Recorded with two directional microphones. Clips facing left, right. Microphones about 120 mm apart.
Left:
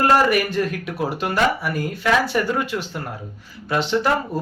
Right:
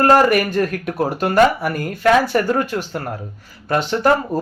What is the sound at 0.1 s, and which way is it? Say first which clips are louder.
Speech: right 4 dB; 45° right (ahead or behind).